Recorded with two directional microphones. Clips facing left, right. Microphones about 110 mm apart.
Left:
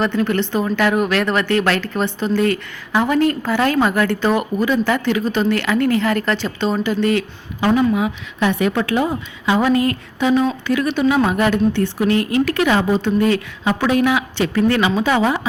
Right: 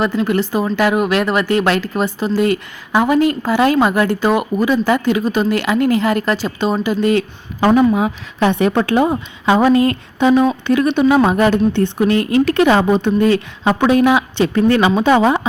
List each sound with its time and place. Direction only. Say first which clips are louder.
0.3 s a woman's voice: right 2 dB; 10° right (ahead or behind)
7.6 s a woman's voice: right 4 dB; 45° right (ahead or behind)
8.4 s a woman's voice: right 3 dB; 30° right (ahead or behind)